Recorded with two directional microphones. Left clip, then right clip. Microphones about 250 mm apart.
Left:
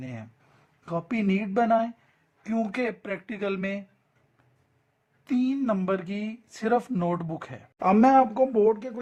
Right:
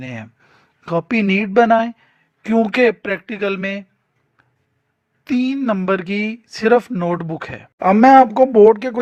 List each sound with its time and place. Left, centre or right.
0.0 s speech: right
5.2 s speech: centre